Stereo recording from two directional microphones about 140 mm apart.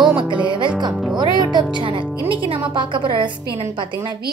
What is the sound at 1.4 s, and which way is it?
A woman's voice, 30° right (ahead or behind).